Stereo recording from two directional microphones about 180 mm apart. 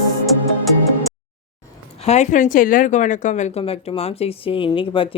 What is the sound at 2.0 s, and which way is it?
A woman's voice, 40° left (ahead or behind).